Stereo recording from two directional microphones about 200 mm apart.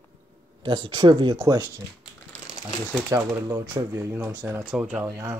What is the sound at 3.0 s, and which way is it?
Speech, 15° right (ahead or behind).